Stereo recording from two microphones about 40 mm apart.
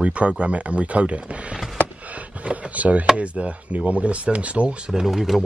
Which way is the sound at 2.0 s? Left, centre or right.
Right.